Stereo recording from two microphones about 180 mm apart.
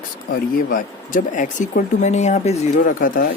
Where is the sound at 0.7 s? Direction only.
45° left (ahead or behind).